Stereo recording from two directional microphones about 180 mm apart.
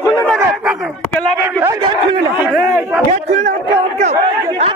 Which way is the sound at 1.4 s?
15° right (ahead or behind).